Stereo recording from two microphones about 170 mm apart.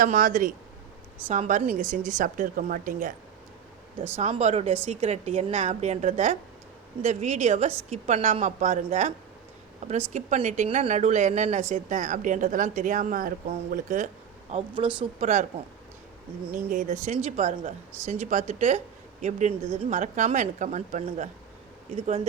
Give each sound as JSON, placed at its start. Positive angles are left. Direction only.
{"t": 0.0, "sound": "speech", "side_deg": -55}
{"t": 4.2, "sound": "a woman's voice", "side_deg": -40}
{"t": 14.5, "sound": "speech", "side_deg": -30}
{"t": 15.2, "sound": "speech", "side_deg": -45}
{"t": 16.5, "sound": "speech", "side_deg": -55}
{"t": 17.2, "sound": "a woman's voice", "side_deg": -40}
{"t": 21.9, "sound": "a woman's voice", "side_deg": -35}